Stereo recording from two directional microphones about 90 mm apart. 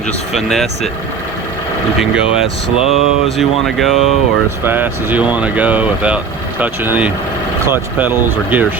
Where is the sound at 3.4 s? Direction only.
Centre (ahead or behind).